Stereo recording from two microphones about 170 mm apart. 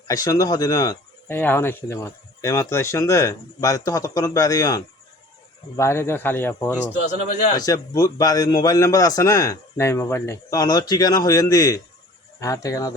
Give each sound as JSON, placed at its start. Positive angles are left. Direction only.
{"t": 0.1, "sound": "speech", "side_deg": 20}